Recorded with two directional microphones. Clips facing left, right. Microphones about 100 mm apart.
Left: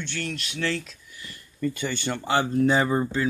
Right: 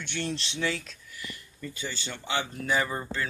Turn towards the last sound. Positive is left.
turn(degrees=20)  # may be behind; listen again after turning